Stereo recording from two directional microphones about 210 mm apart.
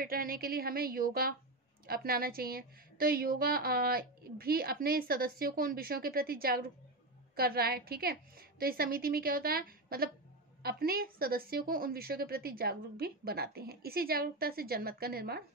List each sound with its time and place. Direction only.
0.0 s a woman's voice: 45° right (ahead or behind)